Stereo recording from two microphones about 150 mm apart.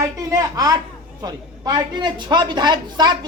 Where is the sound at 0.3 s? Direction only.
25° right (ahead or behind).